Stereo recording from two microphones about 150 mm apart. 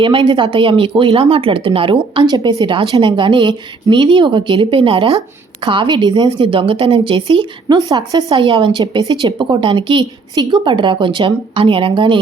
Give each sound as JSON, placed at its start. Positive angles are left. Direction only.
{"t": 0.0, "sound": "speech", "side_deg": -35}